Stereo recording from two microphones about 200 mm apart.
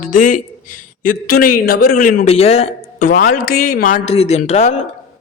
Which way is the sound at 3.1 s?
45° left (ahead or behind).